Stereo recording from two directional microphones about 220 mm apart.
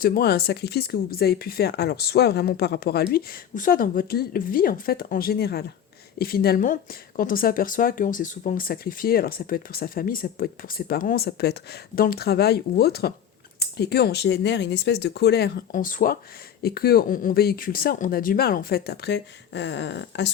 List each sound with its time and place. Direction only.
0.0 s speech: 45° left (ahead or behind)